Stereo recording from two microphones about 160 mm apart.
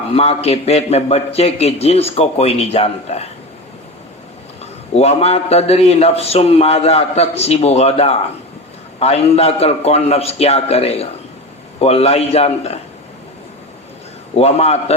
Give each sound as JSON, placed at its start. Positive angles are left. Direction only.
{"t": 0.1, "sound": "a man's voice", "side_deg": 40}
{"t": 4.6, "sound": "a man's voice", "side_deg": 40}
{"t": 14.3, "sound": "a man's voice", "side_deg": 40}